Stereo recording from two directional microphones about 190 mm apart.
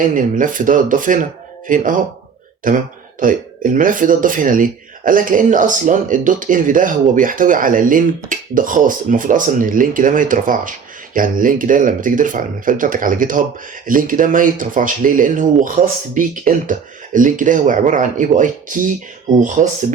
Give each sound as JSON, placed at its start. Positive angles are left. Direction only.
{"t": 0.0, "sound": "speech", "side_deg": -45}